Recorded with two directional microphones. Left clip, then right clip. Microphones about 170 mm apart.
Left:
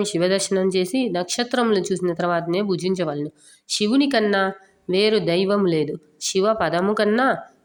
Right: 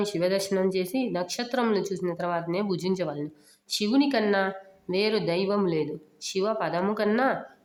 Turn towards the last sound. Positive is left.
turn(degrees=25)  # may be behind; listen again after turning